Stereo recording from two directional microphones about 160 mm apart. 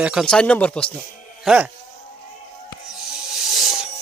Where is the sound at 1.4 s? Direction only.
5° right (ahead or behind).